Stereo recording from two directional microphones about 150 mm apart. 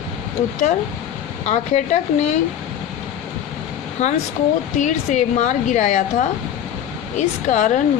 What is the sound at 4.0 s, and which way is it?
Speech, 50° left (ahead or behind).